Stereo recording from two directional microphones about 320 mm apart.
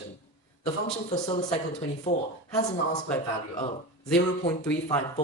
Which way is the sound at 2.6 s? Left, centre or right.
Left.